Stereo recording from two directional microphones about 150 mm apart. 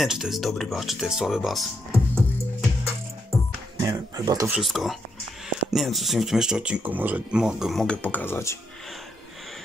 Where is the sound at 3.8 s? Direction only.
20° right (ahead or behind).